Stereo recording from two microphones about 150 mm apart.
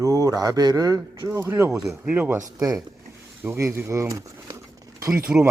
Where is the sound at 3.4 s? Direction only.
15° right (ahead or behind).